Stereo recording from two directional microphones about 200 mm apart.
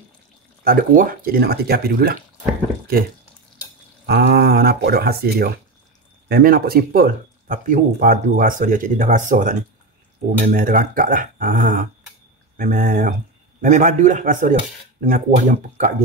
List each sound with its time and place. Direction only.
0.7 s speech: 45° right (ahead or behind)
4.0 s speech: 55° right (ahead or behind)